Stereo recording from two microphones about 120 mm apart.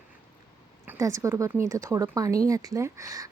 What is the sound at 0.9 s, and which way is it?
A woman's voice, 25° right (ahead or behind).